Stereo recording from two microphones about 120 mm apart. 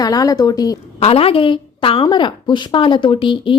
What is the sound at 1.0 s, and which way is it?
A woman's voice, 55° left (ahead or behind).